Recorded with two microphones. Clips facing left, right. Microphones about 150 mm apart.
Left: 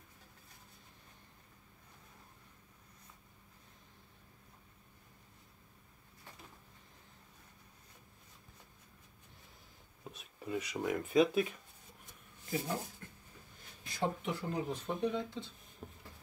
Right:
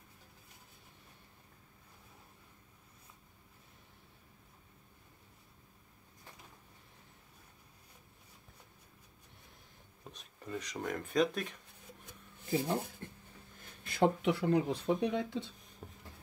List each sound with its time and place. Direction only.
10.0 s speech: 5° left (ahead or behind)
12.4 s speech: 25° right (ahead or behind)
13.8 s speech: 65° right (ahead or behind)
15.8 s a sound: 5° left (ahead or behind)